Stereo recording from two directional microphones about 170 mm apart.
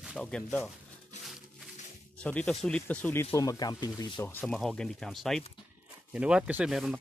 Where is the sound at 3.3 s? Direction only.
20° left (ahead or behind).